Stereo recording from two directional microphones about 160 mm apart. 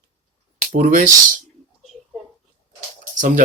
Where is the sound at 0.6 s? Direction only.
50° right (ahead or behind).